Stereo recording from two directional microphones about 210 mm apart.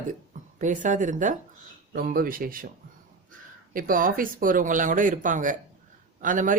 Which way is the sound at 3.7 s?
40° right (ahead or behind).